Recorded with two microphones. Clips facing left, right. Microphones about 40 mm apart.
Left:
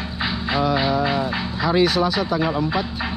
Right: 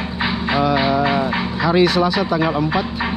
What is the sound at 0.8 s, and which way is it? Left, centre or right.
Music, right.